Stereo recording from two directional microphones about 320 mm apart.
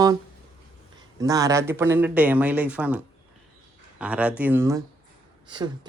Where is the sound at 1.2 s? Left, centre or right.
Centre.